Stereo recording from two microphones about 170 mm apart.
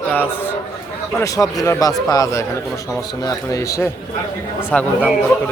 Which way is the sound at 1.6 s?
20° left (ahead or behind).